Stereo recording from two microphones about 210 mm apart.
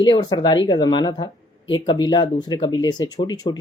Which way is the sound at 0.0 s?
20° left (ahead or behind).